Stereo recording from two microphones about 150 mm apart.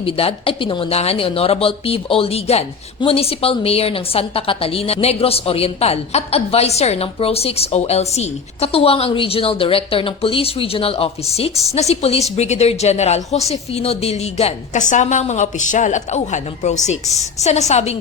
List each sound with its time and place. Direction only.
0.0 s speech: 40° left (ahead or behind)